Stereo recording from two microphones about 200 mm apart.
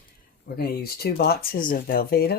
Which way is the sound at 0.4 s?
50° left (ahead or behind).